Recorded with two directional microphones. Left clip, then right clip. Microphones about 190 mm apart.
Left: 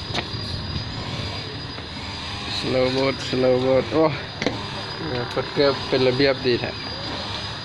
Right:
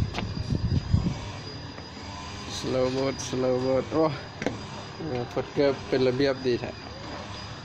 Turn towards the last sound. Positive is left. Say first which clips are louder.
# left 6 dB
turn(degrees=-10)  # may be behind; listen again after turning